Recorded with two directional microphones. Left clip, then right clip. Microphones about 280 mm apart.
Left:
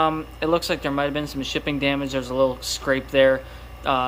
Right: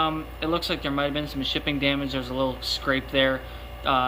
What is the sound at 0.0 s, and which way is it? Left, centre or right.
Speech, centre.